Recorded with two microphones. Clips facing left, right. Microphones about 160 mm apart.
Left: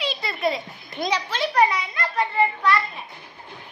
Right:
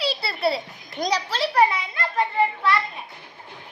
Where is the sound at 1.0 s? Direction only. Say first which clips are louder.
Right 1 dB; 35° right (ahead or behind).